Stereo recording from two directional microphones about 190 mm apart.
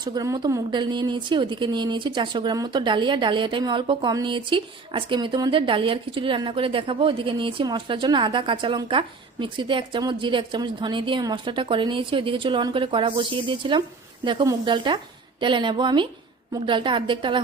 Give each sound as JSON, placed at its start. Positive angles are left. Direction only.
{"t": 0.0, "sound": "a woman's voice", "side_deg": -20}